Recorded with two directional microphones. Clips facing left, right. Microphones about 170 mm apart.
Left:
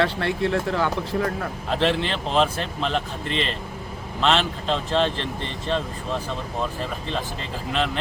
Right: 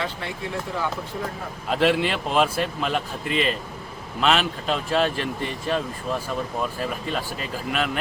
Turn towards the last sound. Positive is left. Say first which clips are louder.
# even
turn(degrees=-10)  # may be behind; listen again after turning